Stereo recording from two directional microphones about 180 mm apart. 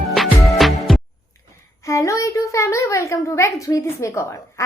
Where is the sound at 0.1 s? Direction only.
Centre (ahead or behind).